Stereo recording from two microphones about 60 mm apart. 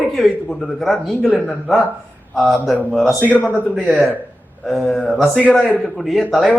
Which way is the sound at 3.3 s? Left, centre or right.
Left.